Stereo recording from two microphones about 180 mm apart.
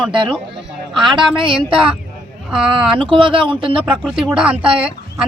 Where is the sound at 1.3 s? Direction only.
30° right (ahead or behind).